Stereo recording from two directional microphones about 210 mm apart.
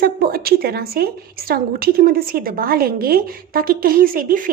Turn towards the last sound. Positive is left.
turn(degrees=-40)  # may be behind; listen again after turning